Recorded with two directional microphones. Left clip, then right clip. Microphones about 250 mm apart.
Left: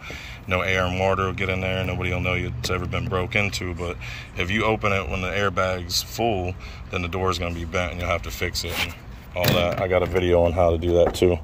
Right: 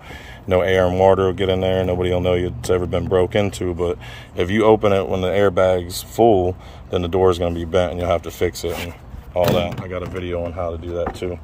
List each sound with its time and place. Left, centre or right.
0.5 s speech: right
9.3 s speech: centre
10.1 s speech: left
10.4 s speech: left